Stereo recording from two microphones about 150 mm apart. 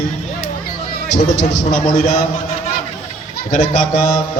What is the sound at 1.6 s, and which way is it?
Speech, 55° left (ahead or behind).